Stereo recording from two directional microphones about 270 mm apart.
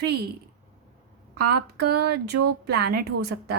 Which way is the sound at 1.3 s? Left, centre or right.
Right.